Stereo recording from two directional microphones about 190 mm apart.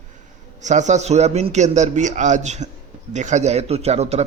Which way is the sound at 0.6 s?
40° right (ahead or behind).